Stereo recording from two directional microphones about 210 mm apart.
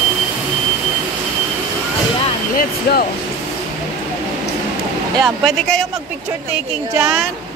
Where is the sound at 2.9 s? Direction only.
50° left (ahead or behind).